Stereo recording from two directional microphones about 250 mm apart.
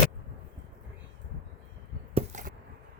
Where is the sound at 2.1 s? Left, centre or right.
Right.